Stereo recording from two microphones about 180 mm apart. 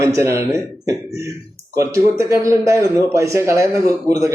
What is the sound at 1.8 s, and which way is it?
Speech, 15° right (ahead or behind).